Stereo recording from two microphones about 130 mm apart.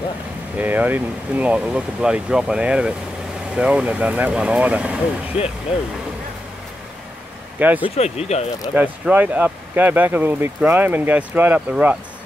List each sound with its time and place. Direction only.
0.6 s speech: 15° right (ahead or behind)
7.5 s speech: 10° right (ahead or behind)
7.9 s speech: 55° left (ahead or behind)
8.7 s speech: 10° right (ahead or behind)